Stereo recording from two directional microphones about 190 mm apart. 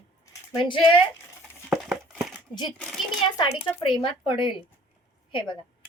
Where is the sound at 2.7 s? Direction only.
5° left (ahead or behind).